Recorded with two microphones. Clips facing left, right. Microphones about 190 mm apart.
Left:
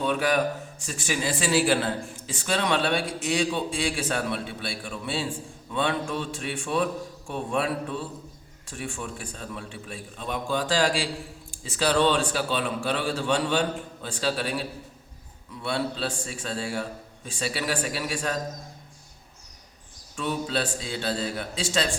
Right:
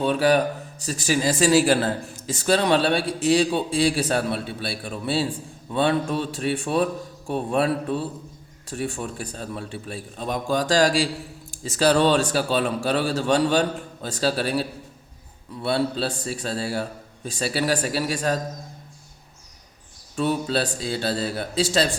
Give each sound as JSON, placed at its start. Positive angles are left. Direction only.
{"t": 0.0, "sound": "a man's voice", "side_deg": -35}
{"t": 15.6, "sound": "a man's voice", "side_deg": -35}
{"t": 20.1, "sound": "a man's voice", "side_deg": -40}